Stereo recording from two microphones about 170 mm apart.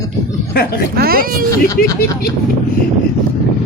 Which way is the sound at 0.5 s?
65° left (ahead or behind).